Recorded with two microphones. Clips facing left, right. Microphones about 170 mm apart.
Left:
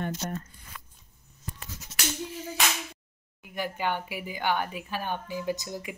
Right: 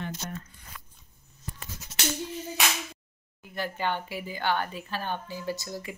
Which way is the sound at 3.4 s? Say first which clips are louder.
Even; 10° left (ahead or behind).